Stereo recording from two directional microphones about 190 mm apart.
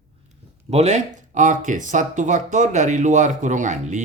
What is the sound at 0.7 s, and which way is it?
Speech, 35° right (ahead or behind).